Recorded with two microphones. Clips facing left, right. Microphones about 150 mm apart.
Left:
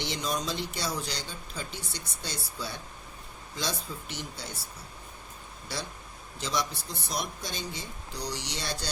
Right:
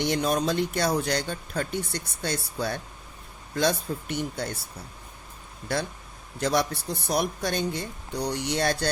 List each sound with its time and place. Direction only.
0.0 s speech: 55° right (ahead or behind)
5.7 s speech: 55° right (ahead or behind)